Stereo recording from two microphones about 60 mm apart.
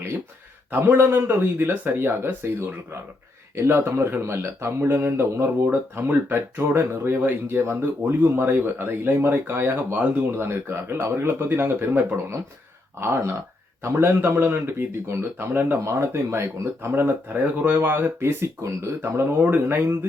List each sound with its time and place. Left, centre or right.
0.7 s speech: right
1.7 s speech: right
2.0 s speech: right
15.8 s speech: right
17.7 s speech: right
19.4 s speech: right
19.7 s speech: right